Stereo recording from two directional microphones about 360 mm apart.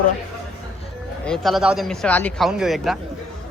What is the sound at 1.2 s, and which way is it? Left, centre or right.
Speech, centre.